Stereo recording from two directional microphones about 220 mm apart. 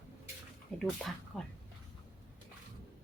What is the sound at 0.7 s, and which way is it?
Speech, 5° left (ahead or behind).